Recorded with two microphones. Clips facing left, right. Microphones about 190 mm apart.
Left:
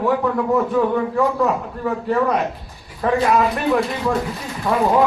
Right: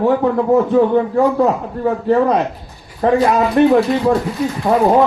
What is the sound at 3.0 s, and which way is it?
Speech, 30° right (ahead or behind).